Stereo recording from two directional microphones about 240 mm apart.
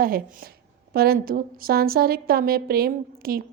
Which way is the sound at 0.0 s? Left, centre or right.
Right.